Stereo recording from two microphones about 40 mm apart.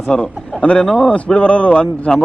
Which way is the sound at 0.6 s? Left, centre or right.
Left.